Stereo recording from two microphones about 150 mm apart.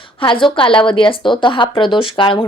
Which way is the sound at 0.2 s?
35° left (ahead or behind).